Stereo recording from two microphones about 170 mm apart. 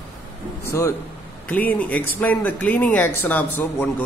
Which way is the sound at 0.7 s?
15° left (ahead or behind).